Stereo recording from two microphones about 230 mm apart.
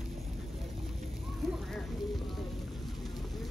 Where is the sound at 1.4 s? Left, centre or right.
Centre.